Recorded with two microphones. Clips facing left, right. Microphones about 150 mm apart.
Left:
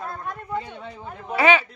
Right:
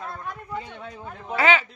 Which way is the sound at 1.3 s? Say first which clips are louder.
Left 2 dB; 15° left (ahead or behind).